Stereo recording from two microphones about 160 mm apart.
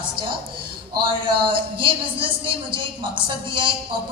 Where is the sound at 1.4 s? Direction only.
35° right (ahead or behind).